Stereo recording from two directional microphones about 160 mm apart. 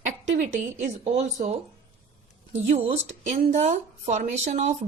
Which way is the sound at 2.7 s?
40° right (ahead or behind).